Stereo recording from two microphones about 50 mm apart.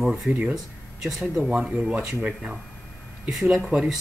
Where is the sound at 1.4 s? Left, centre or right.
Right.